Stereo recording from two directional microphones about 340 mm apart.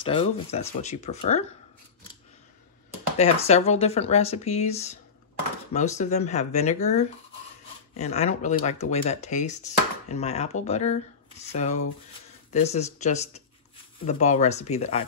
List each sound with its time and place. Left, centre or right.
0.0 s speech: centre
3.2 s speech: centre